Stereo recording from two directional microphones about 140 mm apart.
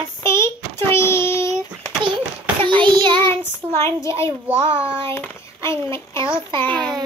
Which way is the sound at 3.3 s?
20° left (ahead or behind).